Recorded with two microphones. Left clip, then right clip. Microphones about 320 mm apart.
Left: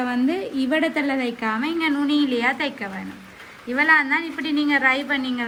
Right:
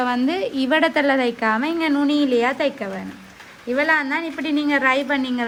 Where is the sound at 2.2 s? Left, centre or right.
Right.